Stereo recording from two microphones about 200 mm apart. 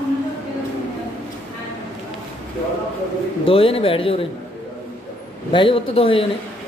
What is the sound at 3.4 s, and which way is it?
Speech, 25° left (ahead or behind).